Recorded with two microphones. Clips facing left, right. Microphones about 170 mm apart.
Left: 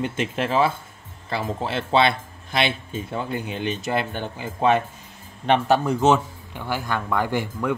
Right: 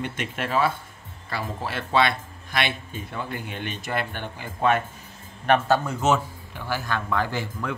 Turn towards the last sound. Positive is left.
turn(degrees=15)  # may be behind; listen again after turning